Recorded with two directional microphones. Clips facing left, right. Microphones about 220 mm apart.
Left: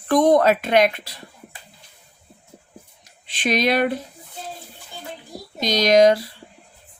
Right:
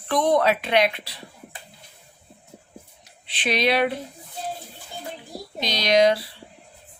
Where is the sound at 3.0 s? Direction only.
45° left (ahead or behind).